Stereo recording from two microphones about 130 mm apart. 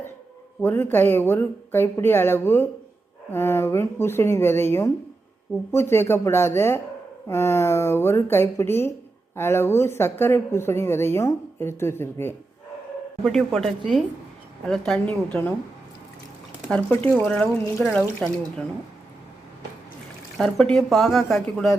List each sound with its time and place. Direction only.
0.6 s speech: 15° left (ahead or behind)
13.2 s a woman's voice: centre (ahead or behind)
16.6 s a woman's voice: 10° left (ahead or behind)
20.4 s a woman's voice: 5° left (ahead or behind)